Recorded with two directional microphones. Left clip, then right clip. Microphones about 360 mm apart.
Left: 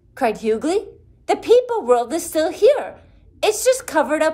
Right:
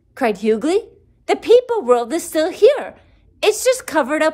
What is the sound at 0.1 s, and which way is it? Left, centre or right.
A woman's voice, right.